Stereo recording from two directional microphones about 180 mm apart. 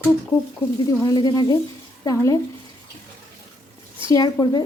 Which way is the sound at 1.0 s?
20° left (ahead or behind).